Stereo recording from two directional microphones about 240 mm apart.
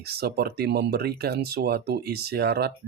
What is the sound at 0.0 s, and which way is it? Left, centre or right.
Speech, right.